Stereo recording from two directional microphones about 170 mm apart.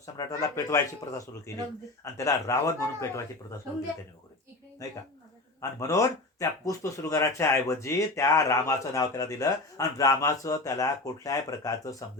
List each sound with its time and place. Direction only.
0.0 s speech: 20° left (ahead or behind)
4.8 s speech: 20° left (ahead or behind)